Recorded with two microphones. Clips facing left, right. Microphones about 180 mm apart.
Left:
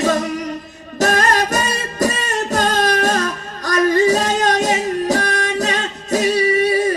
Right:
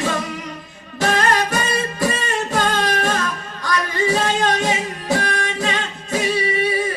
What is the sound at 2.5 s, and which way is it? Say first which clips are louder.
Music: left 4 dB; 40° left (ahead or behind).